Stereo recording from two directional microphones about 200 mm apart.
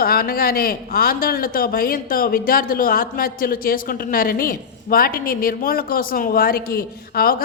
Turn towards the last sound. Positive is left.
turn(degrees=45)  # may be behind; listen again after turning